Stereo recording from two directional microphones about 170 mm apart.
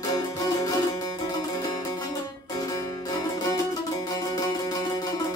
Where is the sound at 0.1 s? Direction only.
20° left (ahead or behind).